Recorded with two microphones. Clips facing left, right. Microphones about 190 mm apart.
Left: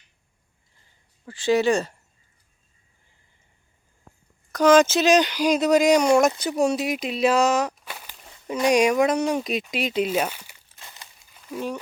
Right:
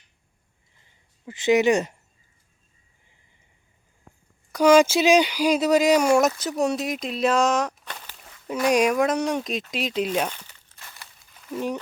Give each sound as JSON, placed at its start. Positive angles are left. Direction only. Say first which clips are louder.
{"t": 1.2, "sound": "speech", "louder": "right 1 dB", "side_deg": -20}
{"t": 4.5, "sound": "speech", "louder": "even", "side_deg": -10}
{"t": 11.3, "sound": "a sound", "louder": "right 2 dB", "side_deg": 0}